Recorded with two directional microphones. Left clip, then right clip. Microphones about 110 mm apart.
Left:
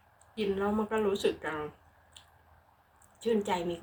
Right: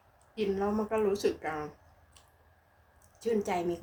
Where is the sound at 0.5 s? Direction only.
20° right (ahead or behind).